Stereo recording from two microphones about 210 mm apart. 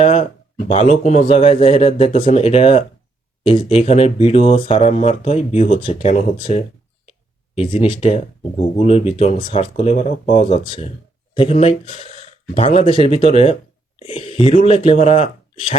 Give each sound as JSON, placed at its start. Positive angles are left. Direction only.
{"t": 0.0, "sound": "a sound", "side_deg": 30}
{"t": 0.7, "sound": "a man's voice", "side_deg": 30}
{"t": 7.7, "sound": "a man's voice", "side_deg": 30}